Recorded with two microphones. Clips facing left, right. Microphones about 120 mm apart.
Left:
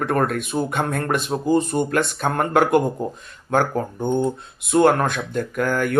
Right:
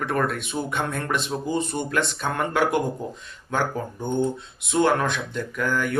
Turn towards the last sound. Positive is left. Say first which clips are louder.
# left 4 dB
turn(degrees=50)  # may be behind; listen again after turning